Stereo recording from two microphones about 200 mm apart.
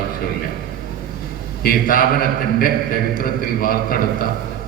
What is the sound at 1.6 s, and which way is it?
A man's voice, 45° left (ahead or behind).